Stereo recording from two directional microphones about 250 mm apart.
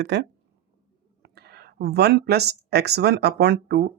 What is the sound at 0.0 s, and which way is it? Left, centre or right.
Speech, right.